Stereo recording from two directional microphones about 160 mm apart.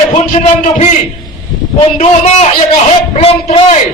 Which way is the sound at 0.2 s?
45° left (ahead or behind).